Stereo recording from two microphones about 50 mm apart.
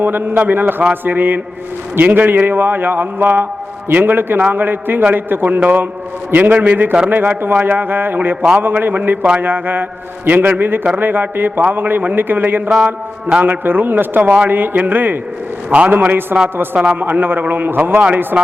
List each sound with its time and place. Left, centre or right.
0.0 s a man's voice: right